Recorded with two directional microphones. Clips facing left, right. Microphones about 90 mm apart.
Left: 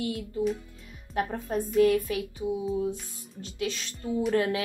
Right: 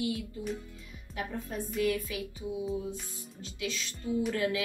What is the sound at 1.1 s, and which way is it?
Speech, 45° left (ahead or behind).